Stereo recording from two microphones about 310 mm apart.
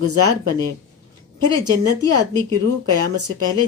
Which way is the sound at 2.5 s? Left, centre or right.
Right.